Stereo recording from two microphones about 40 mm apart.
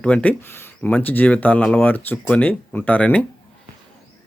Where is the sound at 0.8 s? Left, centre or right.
Left.